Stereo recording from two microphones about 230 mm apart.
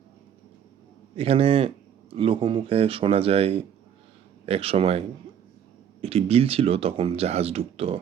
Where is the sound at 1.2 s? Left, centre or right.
Right.